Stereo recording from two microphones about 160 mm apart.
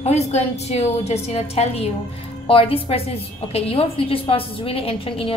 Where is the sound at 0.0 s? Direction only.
45° left (ahead or behind).